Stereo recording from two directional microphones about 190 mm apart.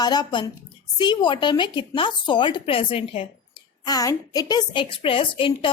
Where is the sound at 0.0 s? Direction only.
20° left (ahead or behind).